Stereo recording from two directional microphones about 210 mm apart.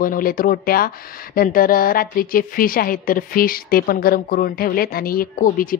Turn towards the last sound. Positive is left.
turn(degrees=40)  # may be behind; listen again after turning